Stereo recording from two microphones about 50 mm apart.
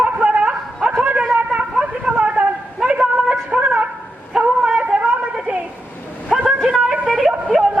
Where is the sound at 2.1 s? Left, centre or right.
Right.